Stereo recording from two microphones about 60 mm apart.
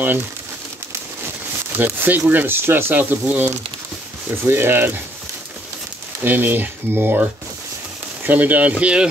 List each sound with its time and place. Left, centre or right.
1.8 s speech: right
2.9 s speech: right
6.2 s speech: right